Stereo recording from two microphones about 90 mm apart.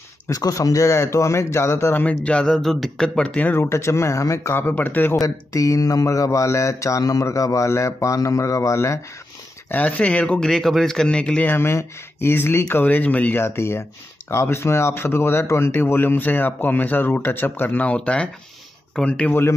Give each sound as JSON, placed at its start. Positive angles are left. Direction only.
{"t": 0.3, "sound": "mantra", "side_deg": 40}
{"t": 3.5, "sound": "speech", "side_deg": 30}
{"t": 5.1, "sound": "mantra", "side_deg": 35}
{"t": 9.7, "sound": "speech", "side_deg": 15}
{"t": 11.5, "sound": "speech", "side_deg": 25}